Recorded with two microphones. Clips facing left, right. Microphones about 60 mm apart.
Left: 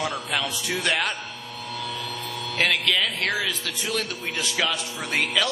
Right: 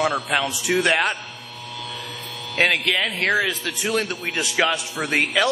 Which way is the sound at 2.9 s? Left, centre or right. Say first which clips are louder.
Right 4 dB; right.